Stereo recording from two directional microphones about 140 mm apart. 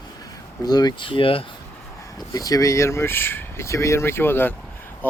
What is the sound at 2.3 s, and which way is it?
Speech, 25° left (ahead or behind).